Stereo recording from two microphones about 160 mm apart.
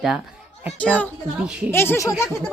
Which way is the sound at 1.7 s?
15° left (ahead or behind).